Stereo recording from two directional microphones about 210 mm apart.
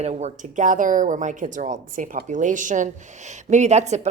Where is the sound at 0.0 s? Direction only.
30° right (ahead or behind).